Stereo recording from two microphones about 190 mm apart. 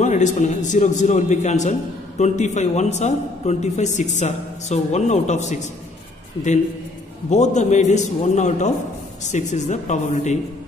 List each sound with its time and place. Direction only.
0.0 s a man's voice: 40° left (ahead or behind)
7.2 s a man's voice: 35° left (ahead or behind)